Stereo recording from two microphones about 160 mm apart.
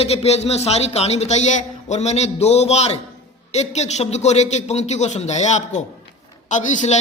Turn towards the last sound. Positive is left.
turn(degrees=50)  # may be behind; listen again after turning